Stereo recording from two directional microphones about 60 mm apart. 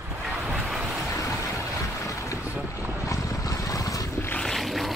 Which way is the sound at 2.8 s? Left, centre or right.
Right.